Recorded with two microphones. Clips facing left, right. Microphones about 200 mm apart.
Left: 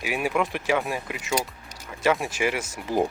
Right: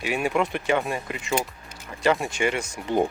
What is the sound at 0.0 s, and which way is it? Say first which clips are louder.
Speech: right 1 dB; centre (ahead or behind).